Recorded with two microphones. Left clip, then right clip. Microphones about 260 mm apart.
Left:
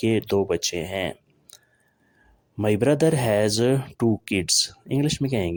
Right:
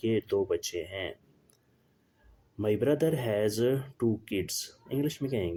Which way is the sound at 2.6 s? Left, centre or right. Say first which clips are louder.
Left 7 dB; left.